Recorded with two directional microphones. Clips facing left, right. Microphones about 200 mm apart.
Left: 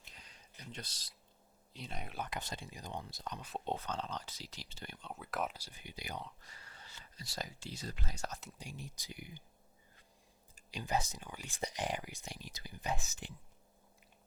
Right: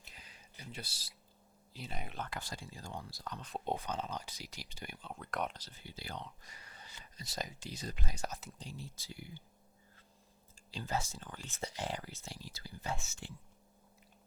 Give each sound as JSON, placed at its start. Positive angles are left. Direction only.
{"t": 0.1, "sound": "a sound", "side_deg": -5}
{"t": 1.7, "sound": "speech", "side_deg": -5}
{"t": 2.1, "sound": "speech", "side_deg": 15}
{"t": 3.6, "sound": "speech", "side_deg": -10}
{"t": 5.0, "sound": "speech", "side_deg": 5}
{"t": 6.4, "sound": "speech", "side_deg": -15}
{"t": 8.5, "sound": "speech", "side_deg": 15}
{"t": 10.7, "sound": "speech", "side_deg": 15}